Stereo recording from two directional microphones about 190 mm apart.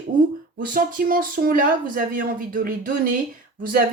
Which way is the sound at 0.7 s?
50° right (ahead or behind).